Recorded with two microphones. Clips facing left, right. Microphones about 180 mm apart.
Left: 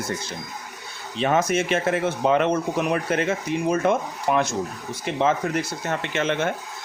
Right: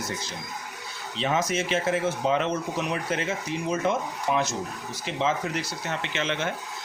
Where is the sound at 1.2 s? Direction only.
55° left (ahead or behind).